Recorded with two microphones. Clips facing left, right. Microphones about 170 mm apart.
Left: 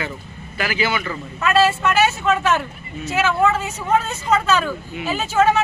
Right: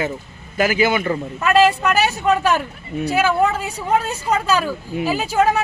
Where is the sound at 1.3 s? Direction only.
15° right (ahead or behind).